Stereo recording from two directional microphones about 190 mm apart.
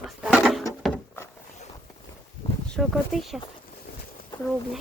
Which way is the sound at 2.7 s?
Centre (ahead or behind).